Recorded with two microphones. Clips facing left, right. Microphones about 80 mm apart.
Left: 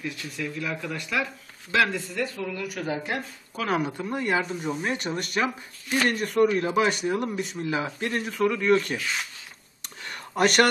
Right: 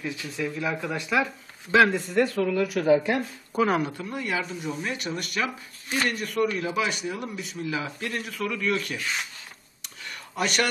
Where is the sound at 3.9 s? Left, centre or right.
Left.